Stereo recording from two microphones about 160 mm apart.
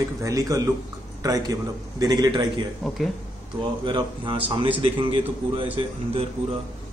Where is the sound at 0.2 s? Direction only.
20° right (ahead or behind).